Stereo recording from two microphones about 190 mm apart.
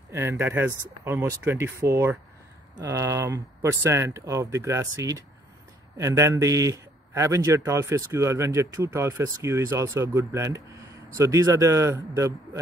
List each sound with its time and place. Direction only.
0.1 s speech: 15° right (ahead or behind)